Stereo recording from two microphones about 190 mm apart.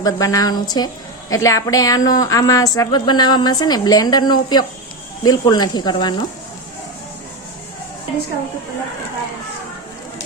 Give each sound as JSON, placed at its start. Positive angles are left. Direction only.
{"t": 0.0, "sound": "a woman's voice", "side_deg": 20}